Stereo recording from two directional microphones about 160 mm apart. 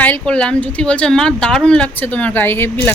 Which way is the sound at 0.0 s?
10° left (ahead or behind).